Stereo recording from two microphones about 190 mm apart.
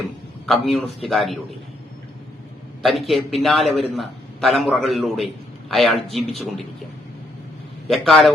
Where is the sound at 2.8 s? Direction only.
Centre (ahead or behind).